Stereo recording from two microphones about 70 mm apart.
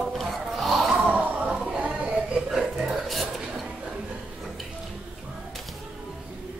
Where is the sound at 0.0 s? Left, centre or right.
Centre.